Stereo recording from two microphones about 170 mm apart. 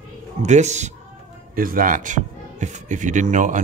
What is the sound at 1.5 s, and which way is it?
Speech, 55° right (ahead or behind).